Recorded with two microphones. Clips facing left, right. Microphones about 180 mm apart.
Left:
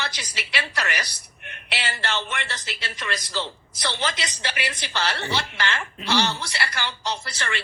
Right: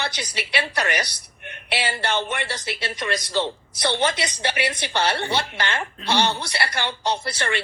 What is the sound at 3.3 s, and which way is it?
A woman's voice, 55° right (ahead or behind).